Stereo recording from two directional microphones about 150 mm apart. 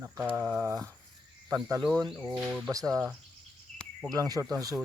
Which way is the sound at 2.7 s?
25° right (ahead or behind).